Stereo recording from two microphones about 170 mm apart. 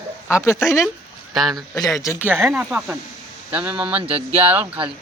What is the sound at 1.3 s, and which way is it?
Speech, centre (ahead or behind).